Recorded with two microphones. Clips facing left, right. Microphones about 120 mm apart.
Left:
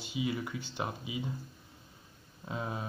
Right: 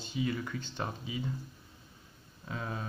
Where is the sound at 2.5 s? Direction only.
20° left (ahead or behind).